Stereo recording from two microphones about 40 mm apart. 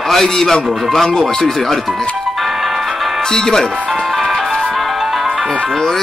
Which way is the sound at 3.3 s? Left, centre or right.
Centre.